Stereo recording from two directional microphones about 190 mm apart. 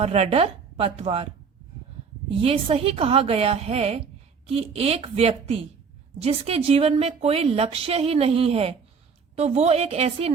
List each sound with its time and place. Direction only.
0.0 s a woman's voice: 35° right (ahead or behind)
2.4 s a woman's voice: 30° right (ahead or behind)